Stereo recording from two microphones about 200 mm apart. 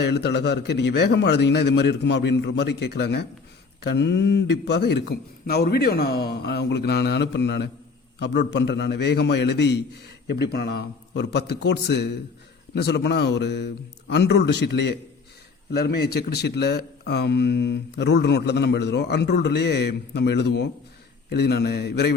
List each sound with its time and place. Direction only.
0.0 s speech: 55° left (ahead or behind)